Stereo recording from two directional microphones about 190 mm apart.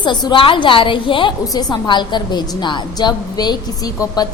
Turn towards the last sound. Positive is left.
turn(degrees=20)  # may be behind; listen again after turning